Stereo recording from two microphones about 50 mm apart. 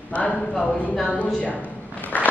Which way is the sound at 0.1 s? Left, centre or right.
Left.